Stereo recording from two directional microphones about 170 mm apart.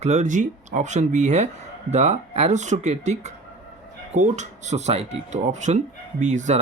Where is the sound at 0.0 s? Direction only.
40° right (ahead or behind).